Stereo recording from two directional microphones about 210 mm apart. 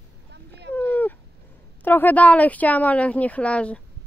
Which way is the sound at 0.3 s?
55° right (ahead or behind).